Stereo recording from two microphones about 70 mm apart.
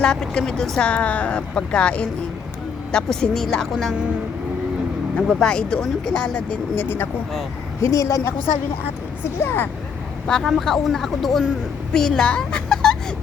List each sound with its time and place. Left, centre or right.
0.0 s speech: centre
5.3 s speech: centre
6.7 s speech: left
7.8 s a woman's voice: left
9.4 s speech: left
10.2 s speech: centre